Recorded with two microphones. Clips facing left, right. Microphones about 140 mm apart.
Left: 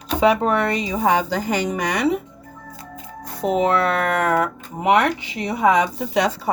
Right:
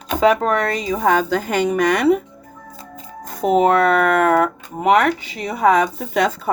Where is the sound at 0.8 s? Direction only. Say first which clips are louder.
Right 2 dB; 50° right (ahead or behind).